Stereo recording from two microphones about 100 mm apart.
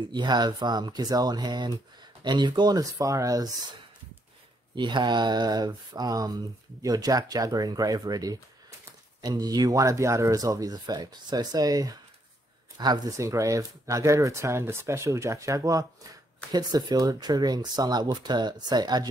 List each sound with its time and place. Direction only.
0.1 s speech: 45° right (ahead or behind)
4.7 s speech: 50° right (ahead or behind)
13.2 s speech: 30° right (ahead or behind)